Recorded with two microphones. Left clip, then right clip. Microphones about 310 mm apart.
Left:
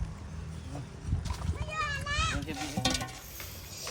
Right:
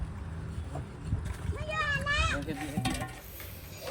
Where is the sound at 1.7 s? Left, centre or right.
Right.